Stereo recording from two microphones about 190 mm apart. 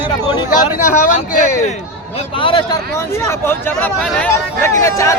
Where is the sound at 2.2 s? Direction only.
25° left (ahead or behind).